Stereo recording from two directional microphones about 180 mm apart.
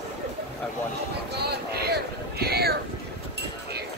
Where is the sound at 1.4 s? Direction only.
65° right (ahead or behind).